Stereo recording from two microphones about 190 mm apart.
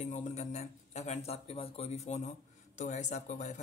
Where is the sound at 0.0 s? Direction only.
35° left (ahead or behind).